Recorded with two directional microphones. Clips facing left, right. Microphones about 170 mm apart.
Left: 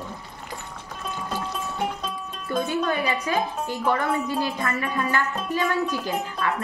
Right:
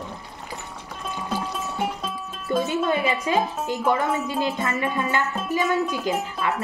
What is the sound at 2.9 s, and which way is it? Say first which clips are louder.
Speech: right 2 dB; 20° right (ahead or behind).